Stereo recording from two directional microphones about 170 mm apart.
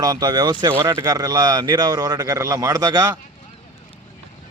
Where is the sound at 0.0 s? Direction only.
20° right (ahead or behind).